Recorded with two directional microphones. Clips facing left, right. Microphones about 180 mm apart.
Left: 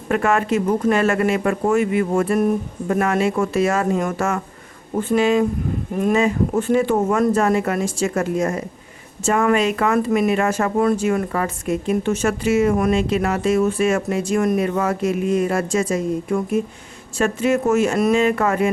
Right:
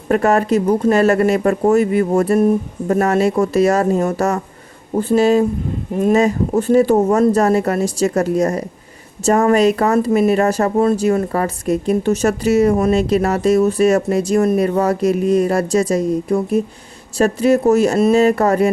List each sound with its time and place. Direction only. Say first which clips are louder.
0.1 s speech: right 4 dB; 40° right (ahead or behind)
6.6 s speech: right 6 dB; 40° right (ahead or behind)